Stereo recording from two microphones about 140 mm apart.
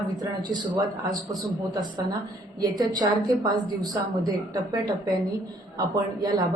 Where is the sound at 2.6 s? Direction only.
30° right (ahead or behind).